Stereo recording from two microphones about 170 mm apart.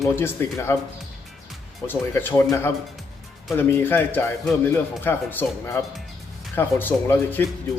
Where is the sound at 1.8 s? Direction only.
15° left (ahead or behind).